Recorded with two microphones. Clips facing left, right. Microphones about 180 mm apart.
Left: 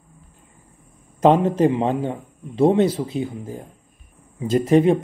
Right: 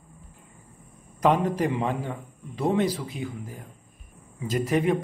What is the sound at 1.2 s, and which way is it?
Speech, 25° left (ahead or behind).